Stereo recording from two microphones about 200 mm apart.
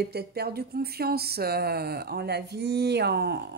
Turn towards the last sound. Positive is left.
turn(degrees=-55)  # may be behind; listen again after turning